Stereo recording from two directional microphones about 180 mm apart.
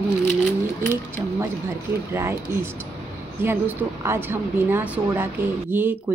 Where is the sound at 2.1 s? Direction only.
15° right (ahead or behind).